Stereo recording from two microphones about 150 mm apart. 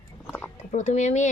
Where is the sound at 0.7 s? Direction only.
55° left (ahead or behind).